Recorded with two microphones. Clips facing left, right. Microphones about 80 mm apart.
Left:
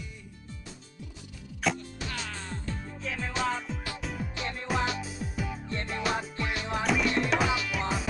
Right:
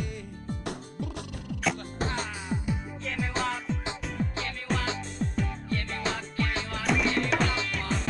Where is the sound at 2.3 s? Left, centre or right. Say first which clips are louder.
Right 5 dB; centre.